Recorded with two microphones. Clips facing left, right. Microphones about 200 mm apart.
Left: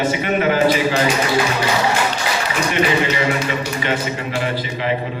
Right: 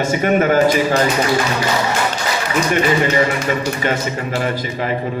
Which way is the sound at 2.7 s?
45° right (ahead or behind).